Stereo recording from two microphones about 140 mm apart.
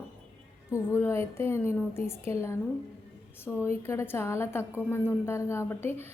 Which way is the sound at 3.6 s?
20° left (ahead or behind).